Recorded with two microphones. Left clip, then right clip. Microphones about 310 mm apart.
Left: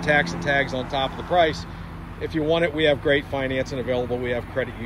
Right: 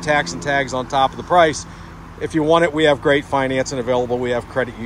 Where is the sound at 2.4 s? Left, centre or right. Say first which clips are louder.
Right 6 dB; right.